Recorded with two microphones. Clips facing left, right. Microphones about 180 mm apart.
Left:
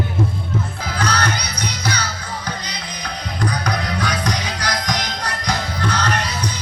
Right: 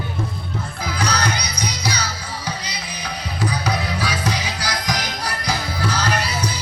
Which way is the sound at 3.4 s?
5° right (ahead or behind).